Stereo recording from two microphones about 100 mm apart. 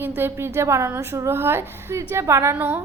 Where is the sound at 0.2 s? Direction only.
25° right (ahead or behind).